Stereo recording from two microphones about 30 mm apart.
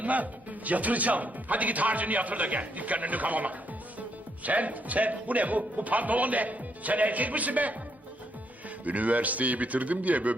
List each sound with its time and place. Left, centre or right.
0.0 s speech: right
8.8 s speech: right